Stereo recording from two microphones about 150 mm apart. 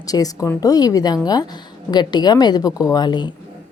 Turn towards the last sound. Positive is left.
turn(degrees=30)  # may be behind; listen again after turning